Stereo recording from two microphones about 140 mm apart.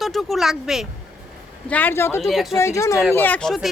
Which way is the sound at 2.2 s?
Centre (ahead or behind).